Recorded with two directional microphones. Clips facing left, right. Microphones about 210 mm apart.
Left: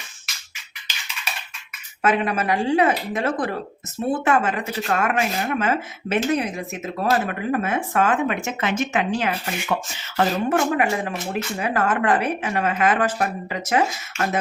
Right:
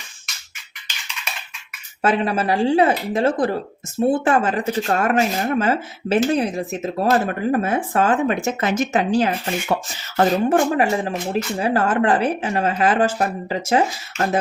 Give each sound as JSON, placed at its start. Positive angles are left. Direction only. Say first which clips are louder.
{"t": 2.0, "sound": "speech", "louder": "right 2 dB", "side_deg": -30}